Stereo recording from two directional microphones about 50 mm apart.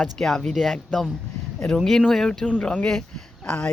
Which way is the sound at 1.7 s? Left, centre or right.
Centre.